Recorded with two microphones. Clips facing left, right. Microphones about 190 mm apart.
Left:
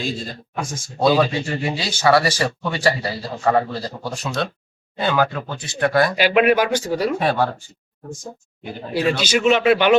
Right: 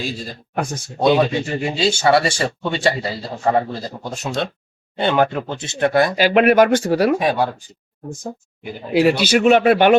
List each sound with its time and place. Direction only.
0.5 s a man's voice: 60° right (ahead or behind)
0.9 s speech: 20° right (ahead or behind)
6.1 s speech: 45° right (ahead or behind); by 7.2 s 60° right (ahead or behind)
7.2 s speech: 15° right (ahead or behind)
8.9 s a man's voice: 65° right (ahead or behind)